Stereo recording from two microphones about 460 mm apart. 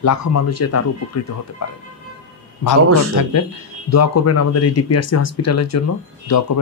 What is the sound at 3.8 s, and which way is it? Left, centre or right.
Speech, left.